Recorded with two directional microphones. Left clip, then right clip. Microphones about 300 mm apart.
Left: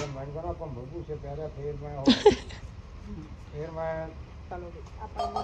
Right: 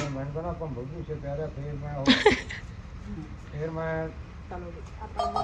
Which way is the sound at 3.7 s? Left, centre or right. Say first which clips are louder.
Even; left.